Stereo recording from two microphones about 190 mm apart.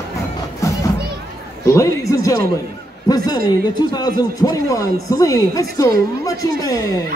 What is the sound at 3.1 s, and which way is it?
Speech, 20° left (ahead or behind).